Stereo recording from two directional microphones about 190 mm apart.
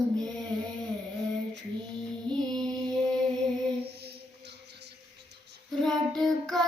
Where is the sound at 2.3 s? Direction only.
5° left (ahead or behind).